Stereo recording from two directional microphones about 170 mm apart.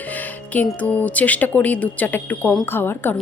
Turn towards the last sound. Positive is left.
turn(degrees=15)  # may be behind; listen again after turning